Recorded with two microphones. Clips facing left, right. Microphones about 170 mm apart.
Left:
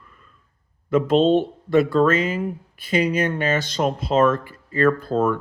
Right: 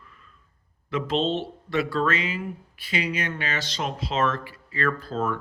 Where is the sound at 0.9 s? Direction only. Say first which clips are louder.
Left 9 dB; 50° left (ahead or behind).